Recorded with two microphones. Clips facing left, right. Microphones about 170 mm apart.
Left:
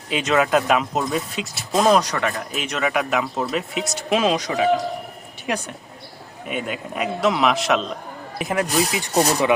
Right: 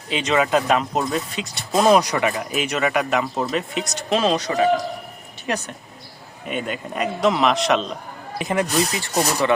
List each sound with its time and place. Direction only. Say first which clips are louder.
0.1 s speech: left 1 dB; 5° left (ahead or behind)
8.9 s speech: left 3 dB; 15° left (ahead or behind)